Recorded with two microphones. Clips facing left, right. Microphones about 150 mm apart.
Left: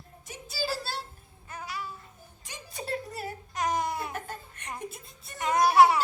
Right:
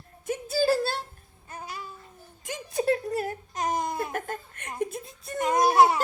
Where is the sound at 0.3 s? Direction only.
55° right (ahead or behind).